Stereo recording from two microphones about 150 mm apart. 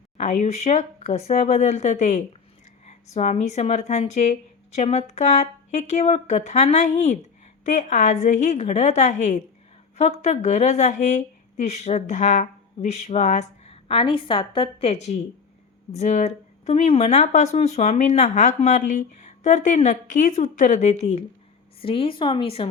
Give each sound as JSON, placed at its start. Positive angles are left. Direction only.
{"t": 0.2, "sound": "speech", "side_deg": 50}